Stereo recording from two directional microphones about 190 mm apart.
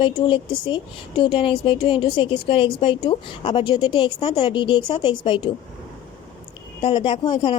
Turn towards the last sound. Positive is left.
turn(degrees=25)  # may be behind; listen again after turning